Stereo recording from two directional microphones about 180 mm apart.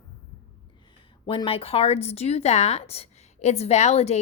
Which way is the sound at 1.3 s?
30° left (ahead or behind).